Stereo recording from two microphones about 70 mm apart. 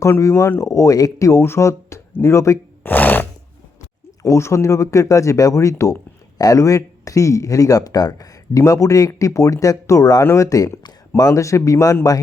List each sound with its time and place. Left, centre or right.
0.2 s speech: left
2.8 s a sound: left
4.2 s speech: left